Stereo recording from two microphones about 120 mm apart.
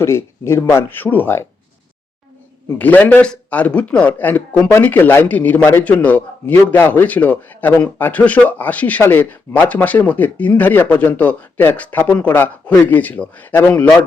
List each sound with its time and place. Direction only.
0.0 s speech: 20° left (ahead or behind)
2.7 s a man's voice: 15° left (ahead or behind)